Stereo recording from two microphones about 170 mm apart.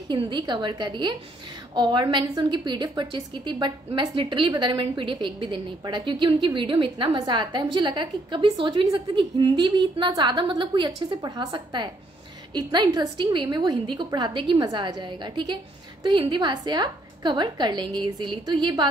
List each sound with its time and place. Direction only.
0.1 s a woman's voice: 25° right (ahead or behind)